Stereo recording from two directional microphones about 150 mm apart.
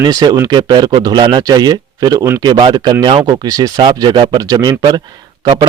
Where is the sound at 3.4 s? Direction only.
25° right (ahead or behind).